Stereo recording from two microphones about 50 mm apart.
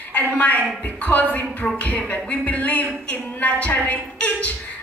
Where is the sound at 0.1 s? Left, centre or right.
Left.